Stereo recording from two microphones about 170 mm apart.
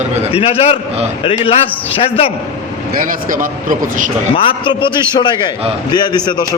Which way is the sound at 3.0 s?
55° right (ahead or behind).